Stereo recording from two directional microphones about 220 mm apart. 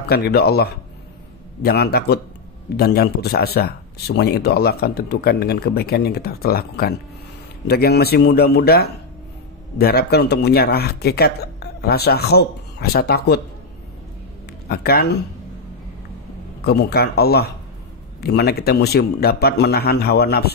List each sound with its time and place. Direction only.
0.1 s speech: 45° left (ahead or behind)
14.7 s speech: 45° left (ahead or behind)
16.6 s speech: 45° left (ahead or behind)